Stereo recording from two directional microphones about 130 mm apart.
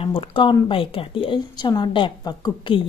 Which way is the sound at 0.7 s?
45° left (ahead or behind).